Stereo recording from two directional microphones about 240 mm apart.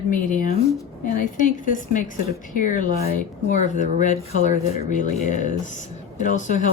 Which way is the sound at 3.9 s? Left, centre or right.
Left.